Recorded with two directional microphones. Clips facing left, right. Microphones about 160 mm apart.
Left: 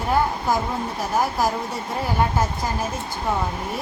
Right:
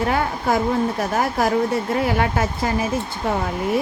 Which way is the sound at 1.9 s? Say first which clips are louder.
Right 3 dB; 75° right (ahead or behind).